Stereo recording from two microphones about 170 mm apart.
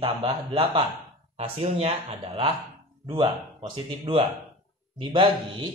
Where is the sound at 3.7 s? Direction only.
30° right (ahead or behind).